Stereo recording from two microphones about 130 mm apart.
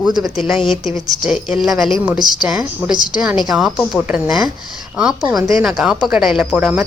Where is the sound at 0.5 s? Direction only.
40° left (ahead or behind).